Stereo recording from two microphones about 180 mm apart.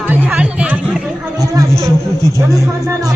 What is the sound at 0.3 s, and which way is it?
Chatter, 5° right (ahead or behind).